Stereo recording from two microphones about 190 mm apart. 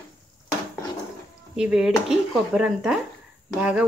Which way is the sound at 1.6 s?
5° right (ahead or behind).